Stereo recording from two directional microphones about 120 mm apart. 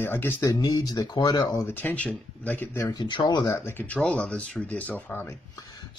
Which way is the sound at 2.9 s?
40° left (ahead or behind).